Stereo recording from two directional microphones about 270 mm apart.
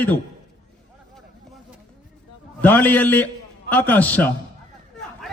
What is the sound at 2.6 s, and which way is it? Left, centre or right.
A man's voice, centre.